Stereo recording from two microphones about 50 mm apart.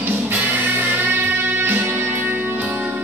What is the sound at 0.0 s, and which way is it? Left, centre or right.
Music, right.